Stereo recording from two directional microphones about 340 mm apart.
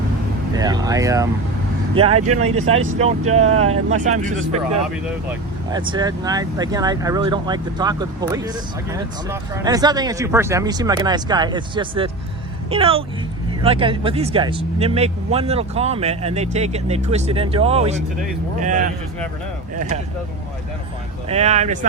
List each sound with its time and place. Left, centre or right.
0.5 s speech: centre
2.1 s speech: right
3.3 s speech: centre
5.7 s speech: centre
21.2 s speech: centre